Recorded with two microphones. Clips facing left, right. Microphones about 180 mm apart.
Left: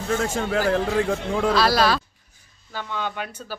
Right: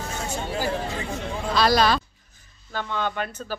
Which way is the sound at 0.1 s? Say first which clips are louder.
Left 9 dB; 90° left.